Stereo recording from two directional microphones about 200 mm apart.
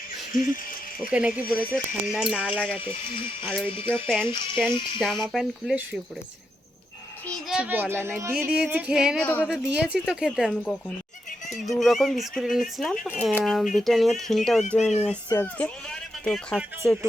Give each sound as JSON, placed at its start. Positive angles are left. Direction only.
{"t": 0.5, "sound": "a sound", "side_deg": 45}
{"t": 1.1, "sound": "speech", "side_deg": -5}
{"t": 3.4, "sound": "speech", "side_deg": 5}
{"t": 4.0, "sound": "speech", "side_deg": -10}
{"t": 4.5, "sound": "speech", "side_deg": 5}
{"t": 7.3, "sound": "speech", "side_deg": -5}
{"t": 9.2, "sound": "a woman's voice", "side_deg": 10}
{"t": 9.5, "sound": "speech", "side_deg": -5}